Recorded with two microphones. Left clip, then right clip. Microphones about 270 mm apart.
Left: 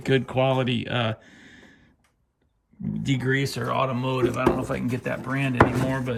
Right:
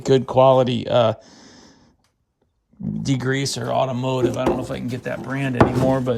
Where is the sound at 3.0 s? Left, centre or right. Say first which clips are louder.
Right 3 dB; right.